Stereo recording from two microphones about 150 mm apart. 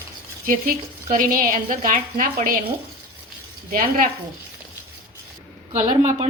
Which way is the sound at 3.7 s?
65° right (ahead or behind).